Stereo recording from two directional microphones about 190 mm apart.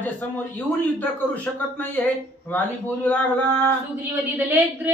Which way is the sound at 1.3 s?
10° left (ahead or behind).